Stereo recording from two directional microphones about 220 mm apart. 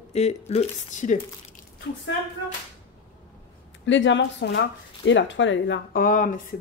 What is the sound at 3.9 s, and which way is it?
Speech, 55° left (ahead or behind).